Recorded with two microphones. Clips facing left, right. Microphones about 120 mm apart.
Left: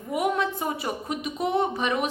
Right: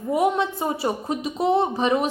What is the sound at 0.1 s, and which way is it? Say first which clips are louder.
A woman's voice: right 4 dB; 30° right (ahead or behind).